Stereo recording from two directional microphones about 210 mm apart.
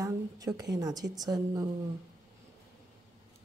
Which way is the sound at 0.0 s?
15° right (ahead or behind).